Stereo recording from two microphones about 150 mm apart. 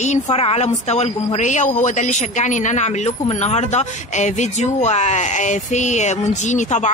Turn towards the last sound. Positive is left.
turn(degrees=55)  # may be behind; listen again after turning